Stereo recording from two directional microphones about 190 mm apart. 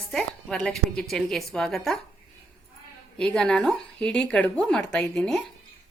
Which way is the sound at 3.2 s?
5° left (ahead or behind).